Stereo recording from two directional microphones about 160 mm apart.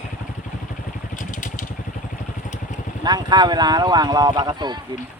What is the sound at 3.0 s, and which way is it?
Speech, 25° right (ahead or behind).